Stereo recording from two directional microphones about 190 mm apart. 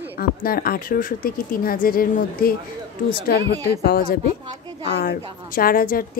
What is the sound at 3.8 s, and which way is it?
Speech, 55° left (ahead or behind).